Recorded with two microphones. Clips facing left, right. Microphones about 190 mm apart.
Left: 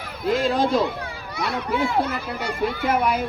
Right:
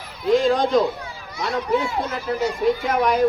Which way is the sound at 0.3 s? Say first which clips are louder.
Right 3 dB; 5° left (ahead or behind).